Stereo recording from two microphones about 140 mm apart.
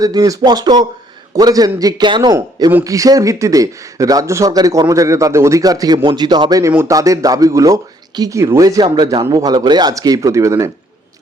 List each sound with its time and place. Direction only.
0.0 s speech: 25° right (ahead or behind)